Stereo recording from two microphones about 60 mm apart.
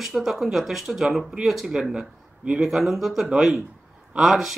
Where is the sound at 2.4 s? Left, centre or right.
Right.